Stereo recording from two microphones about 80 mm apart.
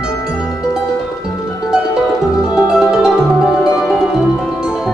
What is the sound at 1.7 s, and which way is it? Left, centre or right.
Music, centre.